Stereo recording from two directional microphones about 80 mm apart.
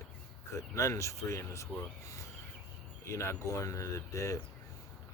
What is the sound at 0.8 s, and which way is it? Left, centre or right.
Speech, left.